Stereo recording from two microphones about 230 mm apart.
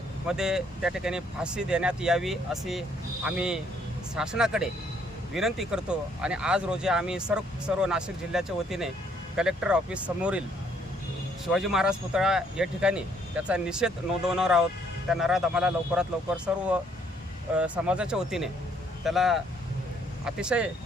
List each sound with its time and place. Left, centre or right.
0.3 s speech: centre
11.5 s speech: centre